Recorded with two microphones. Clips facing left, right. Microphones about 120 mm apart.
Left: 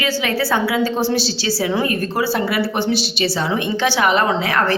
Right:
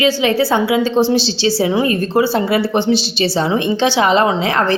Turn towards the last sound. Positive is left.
turn(degrees=-20)  # may be behind; listen again after turning